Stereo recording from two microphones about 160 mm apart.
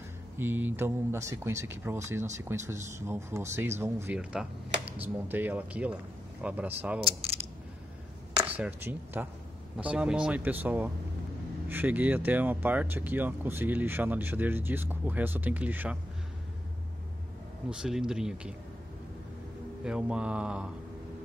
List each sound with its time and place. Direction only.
0.4 s speech: 10° right (ahead or behind)
7.1 s mechanisms: 40° right (ahead or behind)
8.4 s speech: 10° right (ahead or behind)
17.6 s speech: 5° right (ahead or behind)
19.8 s speech: 5° right (ahead or behind)